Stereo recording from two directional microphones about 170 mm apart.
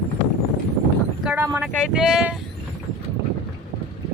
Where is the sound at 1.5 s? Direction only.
5° right (ahead or behind).